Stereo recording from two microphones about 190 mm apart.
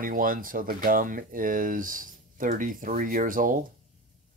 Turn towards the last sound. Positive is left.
turn(degrees=-45)  # may be behind; listen again after turning